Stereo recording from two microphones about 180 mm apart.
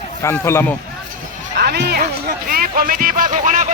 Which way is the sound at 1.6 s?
65° right (ahead or behind).